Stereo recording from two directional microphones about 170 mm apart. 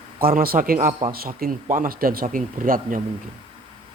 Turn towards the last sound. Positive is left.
turn(degrees=-55)  # may be behind; listen again after turning